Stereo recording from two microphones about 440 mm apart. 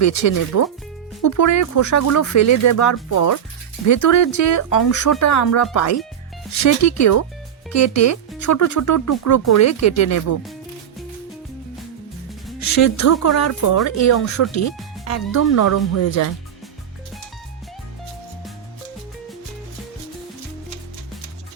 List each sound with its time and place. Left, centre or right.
0.0 s speech: left
12.5 s speech: left